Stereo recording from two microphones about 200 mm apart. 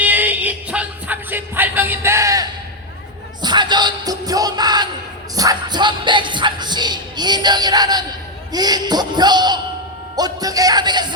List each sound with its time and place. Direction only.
0.0 s music: 10° right (ahead or behind)
8.5 s a sound: 20° right (ahead or behind)
10.2 s music: 20° right (ahead or behind)